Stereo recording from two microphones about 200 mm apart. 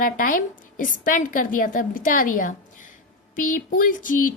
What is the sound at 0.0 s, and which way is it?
A woman's voice, 45° left (ahead or behind).